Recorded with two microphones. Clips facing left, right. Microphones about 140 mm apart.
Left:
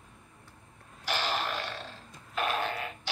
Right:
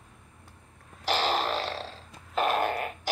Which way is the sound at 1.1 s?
35° right (ahead or behind).